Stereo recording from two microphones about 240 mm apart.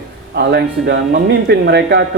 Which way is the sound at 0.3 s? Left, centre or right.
Right.